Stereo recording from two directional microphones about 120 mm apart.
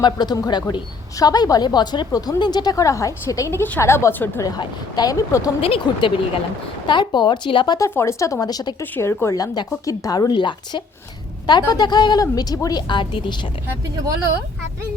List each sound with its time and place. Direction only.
0.0 s a woman's voice: 35° left (ahead or behind); by 4.4 s 20° left (ahead or behind)
4.4 s a woman's voice: 35° left (ahead or behind)
5.5 s a woman's voice: 50° left (ahead or behind)
7.8 s a woman's voice: 20° left (ahead or behind)
8.8 s a woman's voice: 20° left (ahead or behind); by 13.5 s 40° left (ahead or behind)